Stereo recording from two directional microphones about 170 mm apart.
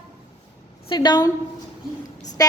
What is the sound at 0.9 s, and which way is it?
Speech, 25° left (ahead or behind).